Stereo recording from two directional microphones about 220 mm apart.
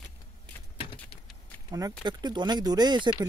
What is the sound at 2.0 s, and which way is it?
Speech, 20° right (ahead or behind).